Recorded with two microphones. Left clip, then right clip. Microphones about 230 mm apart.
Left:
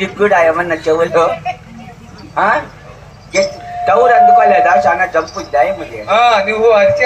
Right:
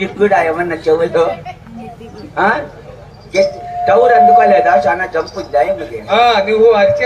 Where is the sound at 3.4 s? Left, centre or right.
Left.